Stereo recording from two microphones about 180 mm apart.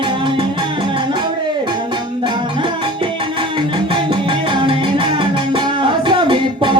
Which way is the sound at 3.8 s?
25° right (ahead or behind).